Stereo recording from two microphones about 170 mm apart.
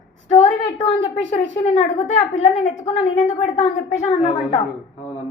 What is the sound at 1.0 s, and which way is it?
A woman's voice, 40° left (ahead or behind).